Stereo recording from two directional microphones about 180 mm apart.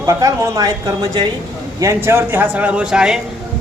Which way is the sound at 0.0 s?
20° right (ahead or behind).